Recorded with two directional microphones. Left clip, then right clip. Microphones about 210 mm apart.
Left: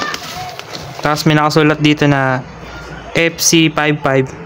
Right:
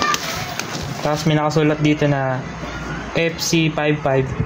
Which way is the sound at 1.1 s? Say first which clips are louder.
Left 6 dB; 40° left (ahead or behind).